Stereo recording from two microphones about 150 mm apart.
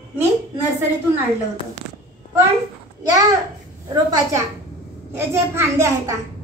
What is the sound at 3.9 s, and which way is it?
A child's voice, 25° right (ahead or behind).